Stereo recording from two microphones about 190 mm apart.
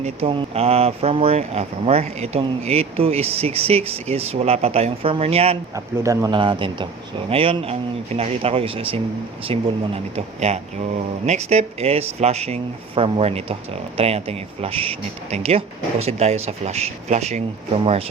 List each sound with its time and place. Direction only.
0.0 s speech: 30° right (ahead or behind)
5.7 s speech: 15° right (ahead or behind); by 17.4 s 35° right (ahead or behind)